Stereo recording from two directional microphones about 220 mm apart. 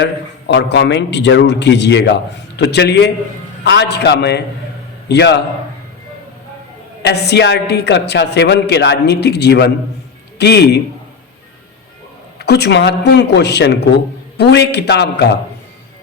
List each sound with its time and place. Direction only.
0.0 s a man's voice: 50° left (ahead or behind)
7.0 s a man's voice: 50° left (ahead or behind)
12.4 s a man's voice: 50° left (ahead or behind)